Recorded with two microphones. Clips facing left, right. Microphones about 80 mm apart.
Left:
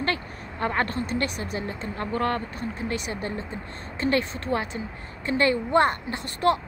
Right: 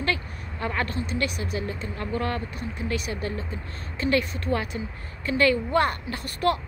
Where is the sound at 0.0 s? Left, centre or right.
Left.